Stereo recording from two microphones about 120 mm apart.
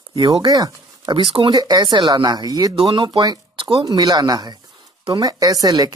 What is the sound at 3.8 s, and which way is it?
Speech, 30° right (ahead or behind).